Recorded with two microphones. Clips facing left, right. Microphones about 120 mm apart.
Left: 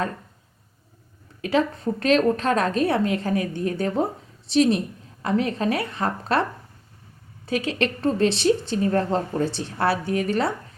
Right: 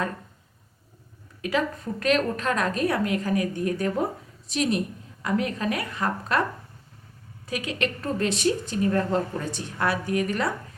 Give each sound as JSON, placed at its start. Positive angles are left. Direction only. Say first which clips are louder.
{"t": 1.4, "sound": "a woman's voice", "louder": "left 4 dB", "side_deg": 30}
{"t": 7.4, "sound": "a woman's voice", "louder": "left 4 dB", "side_deg": 30}